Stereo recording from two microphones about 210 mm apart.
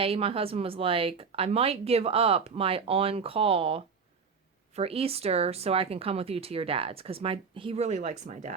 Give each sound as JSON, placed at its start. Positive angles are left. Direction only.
{"t": 0.0, "sound": "speech", "side_deg": -25}